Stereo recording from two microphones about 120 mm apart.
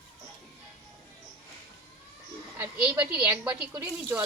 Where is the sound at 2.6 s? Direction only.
15° right (ahead or behind).